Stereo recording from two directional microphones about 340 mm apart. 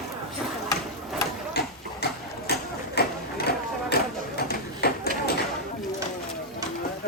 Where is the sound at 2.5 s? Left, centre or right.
Left.